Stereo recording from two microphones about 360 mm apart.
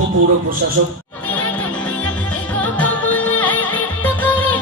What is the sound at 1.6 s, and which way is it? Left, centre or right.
Music, centre.